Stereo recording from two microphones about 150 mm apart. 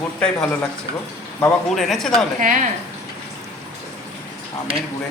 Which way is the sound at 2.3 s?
60° right (ahead or behind).